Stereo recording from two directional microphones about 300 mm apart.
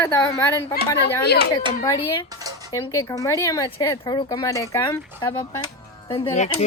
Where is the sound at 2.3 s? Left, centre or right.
Centre.